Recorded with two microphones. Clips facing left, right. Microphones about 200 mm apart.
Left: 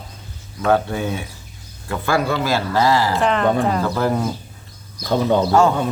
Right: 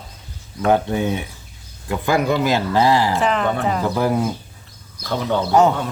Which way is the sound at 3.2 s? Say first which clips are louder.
Left 2 dB; centre (ahead or behind).